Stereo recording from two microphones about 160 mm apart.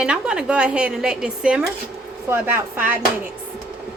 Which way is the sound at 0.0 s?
5° right (ahead or behind).